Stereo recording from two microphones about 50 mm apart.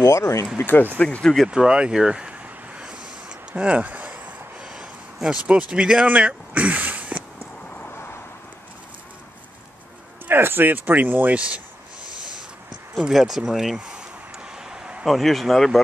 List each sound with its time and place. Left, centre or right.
0.0 s speech: left
0.6 s speech: left
1.0 s speech: centre
1.5 s a sound: centre
4.6 s a sound: centre
5.5 s speech: right
6.0 s speech: right
10.2 s speech: right
11.3 s speech: right
13.1 s speech: centre
13.7 s a sound: centre
15.0 s speech: centre